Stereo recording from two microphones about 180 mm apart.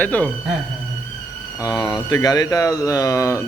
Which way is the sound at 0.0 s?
10° left (ahead or behind).